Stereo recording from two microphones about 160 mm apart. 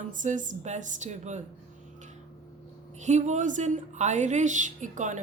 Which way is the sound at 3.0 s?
50° right (ahead or behind).